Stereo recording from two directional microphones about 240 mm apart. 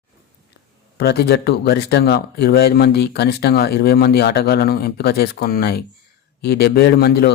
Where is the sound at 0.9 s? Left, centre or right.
Left.